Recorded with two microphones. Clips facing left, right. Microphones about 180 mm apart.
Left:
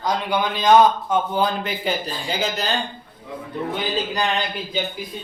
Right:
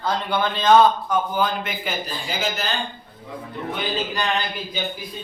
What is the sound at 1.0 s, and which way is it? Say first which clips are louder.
Speech: left 1 dB; 25° left (ahead or behind).